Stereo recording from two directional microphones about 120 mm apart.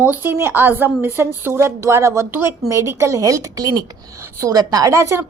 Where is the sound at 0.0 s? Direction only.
15° right (ahead or behind).